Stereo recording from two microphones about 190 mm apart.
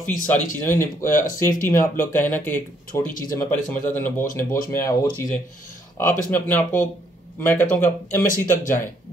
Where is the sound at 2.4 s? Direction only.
45° left (ahead or behind).